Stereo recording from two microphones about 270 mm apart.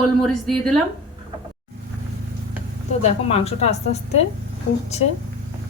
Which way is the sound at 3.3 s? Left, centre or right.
Left.